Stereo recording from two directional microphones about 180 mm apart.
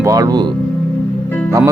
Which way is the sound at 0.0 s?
20° right (ahead or behind).